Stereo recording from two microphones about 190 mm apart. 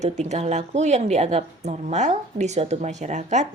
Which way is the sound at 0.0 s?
35° right (ahead or behind).